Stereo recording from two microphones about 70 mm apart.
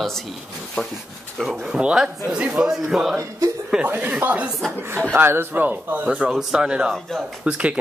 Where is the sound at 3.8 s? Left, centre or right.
Right.